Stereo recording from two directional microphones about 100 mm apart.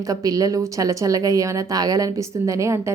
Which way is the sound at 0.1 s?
35° right (ahead or behind).